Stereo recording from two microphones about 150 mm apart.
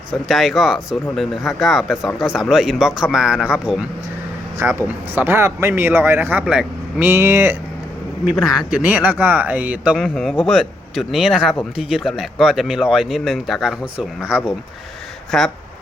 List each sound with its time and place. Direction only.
0.3 s speech: centre (ahead or behind)
8.4 s speech: 5° right (ahead or behind)